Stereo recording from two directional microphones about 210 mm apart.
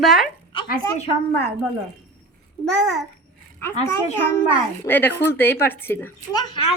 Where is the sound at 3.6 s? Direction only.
10° left (ahead or behind).